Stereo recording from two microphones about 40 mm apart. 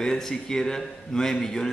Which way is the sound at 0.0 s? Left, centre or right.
Centre.